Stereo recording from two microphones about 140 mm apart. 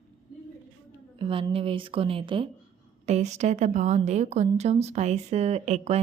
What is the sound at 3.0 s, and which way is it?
A woman's voice, 55° right (ahead or behind).